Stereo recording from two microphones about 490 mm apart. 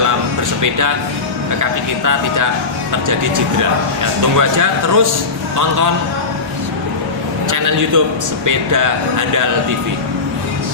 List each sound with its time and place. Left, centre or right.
3.1 s speech: right
7.5 s speech: right